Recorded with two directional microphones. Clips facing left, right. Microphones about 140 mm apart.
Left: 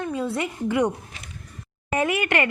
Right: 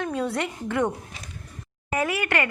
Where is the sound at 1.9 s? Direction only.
20° left (ahead or behind).